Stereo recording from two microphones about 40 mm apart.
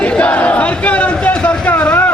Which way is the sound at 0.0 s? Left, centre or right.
Left.